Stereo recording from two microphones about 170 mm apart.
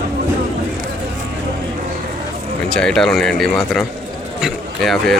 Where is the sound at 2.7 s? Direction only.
5° left (ahead or behind).